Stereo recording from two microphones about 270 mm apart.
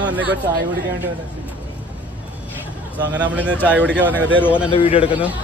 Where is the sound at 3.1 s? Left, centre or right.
Centre.